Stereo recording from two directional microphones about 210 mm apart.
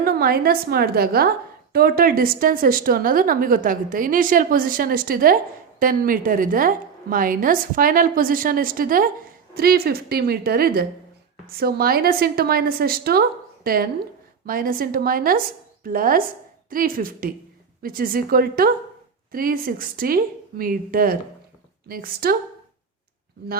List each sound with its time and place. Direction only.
0.0 s a woman's voice: 45° right (ahead or behind)